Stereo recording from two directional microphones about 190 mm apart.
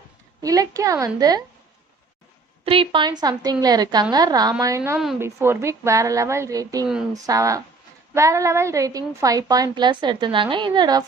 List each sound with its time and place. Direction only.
0.4 s a woman's voice: 20° right (ahead or behind)
2.6 s a woman's voice: 30° right (ahead or behind)